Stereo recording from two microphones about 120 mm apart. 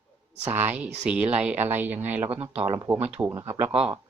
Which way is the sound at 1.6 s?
15° right (ahead or behind).